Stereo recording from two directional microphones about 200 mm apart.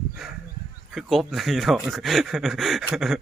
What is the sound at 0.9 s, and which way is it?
Speech, centre (ahead or behind).